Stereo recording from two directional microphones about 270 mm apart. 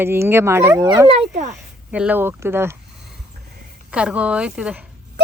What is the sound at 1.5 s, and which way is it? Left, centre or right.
Speech, centre.